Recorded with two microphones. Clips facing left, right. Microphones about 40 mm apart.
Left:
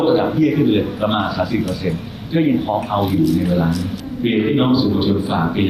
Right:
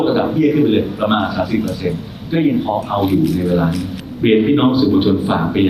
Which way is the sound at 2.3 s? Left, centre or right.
Right.